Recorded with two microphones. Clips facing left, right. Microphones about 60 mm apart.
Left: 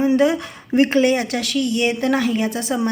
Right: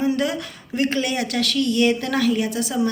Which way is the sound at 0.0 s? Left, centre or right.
Left.